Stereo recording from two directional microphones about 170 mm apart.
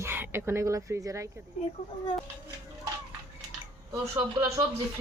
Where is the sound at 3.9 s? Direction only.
25° right (ahead or behind).